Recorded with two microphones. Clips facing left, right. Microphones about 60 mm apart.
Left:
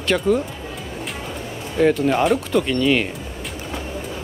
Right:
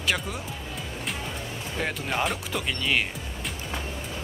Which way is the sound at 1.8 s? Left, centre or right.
Centre.